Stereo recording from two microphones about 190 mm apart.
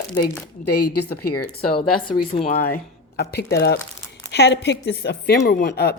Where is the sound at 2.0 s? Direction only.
25° left (ahead or behind).